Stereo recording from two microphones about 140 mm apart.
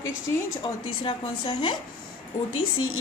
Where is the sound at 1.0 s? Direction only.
35° left (ahead or behind).